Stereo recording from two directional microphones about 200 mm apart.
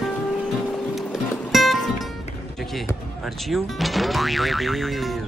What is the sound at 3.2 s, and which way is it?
Speech, centre (ahead or behind).